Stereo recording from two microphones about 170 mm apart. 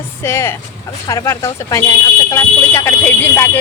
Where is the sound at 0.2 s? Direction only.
15° left (ahead or behind).